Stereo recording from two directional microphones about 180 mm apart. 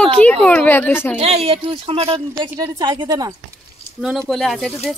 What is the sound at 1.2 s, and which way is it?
A woman's voice, 35° right (ahead or behind).